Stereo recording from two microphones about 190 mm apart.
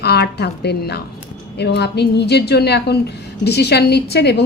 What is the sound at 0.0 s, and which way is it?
A woman's voice, 60° left (ahead or behind).